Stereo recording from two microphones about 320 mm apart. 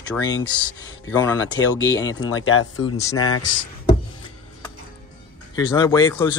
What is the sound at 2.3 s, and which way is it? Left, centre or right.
Speech, left.